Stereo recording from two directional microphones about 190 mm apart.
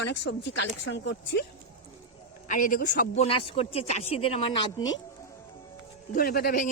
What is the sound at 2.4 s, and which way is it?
A man's voice, 45° left (ahead or behind).